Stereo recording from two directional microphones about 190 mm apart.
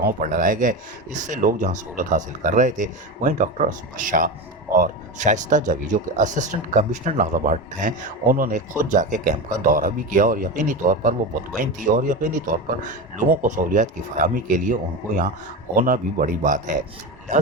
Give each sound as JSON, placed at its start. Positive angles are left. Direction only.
{"t": 0.0, "sound": "speech", "side_deg": -45}